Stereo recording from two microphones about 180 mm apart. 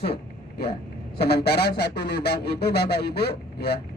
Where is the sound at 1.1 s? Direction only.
60° left (ahead or behind).